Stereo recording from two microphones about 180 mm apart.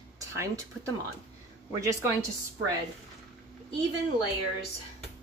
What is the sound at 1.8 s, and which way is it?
Speech, 15° right (ahead or behind).